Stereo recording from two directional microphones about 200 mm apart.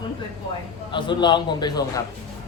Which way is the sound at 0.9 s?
25° left (ahead or behind).